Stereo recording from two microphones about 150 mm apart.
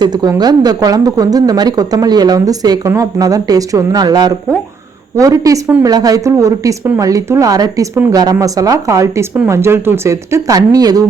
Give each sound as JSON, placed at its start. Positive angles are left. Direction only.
{"t": 0.0, "sound": "speech", "side_deg": -25}